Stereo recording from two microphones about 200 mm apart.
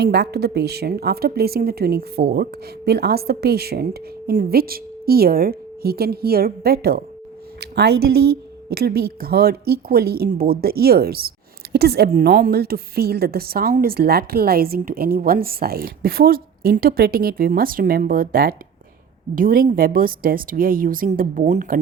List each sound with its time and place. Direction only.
0.0 s speech: 55° right (ahead or behind)